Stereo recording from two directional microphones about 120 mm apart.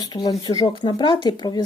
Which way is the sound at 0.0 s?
35° left (ahead or behind).